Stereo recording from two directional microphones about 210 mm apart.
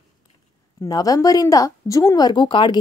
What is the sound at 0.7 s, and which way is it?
A woman's voice, 15° left (ahead or behind).